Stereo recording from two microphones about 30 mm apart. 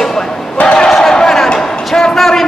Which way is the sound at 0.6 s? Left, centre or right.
Left.